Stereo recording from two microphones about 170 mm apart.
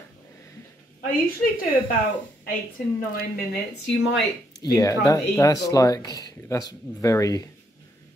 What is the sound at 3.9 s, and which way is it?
Speech, 90° left.